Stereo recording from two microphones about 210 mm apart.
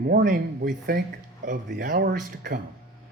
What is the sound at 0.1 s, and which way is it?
Speech, 45° right (ahead or behind).